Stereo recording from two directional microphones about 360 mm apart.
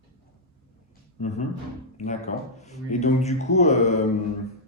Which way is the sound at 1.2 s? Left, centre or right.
Centre.